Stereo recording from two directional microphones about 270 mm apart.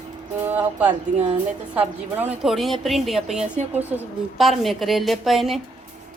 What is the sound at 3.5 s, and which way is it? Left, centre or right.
Music, right.